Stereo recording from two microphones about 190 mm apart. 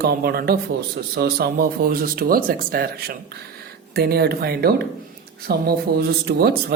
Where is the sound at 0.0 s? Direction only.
55° right (ahead or behind).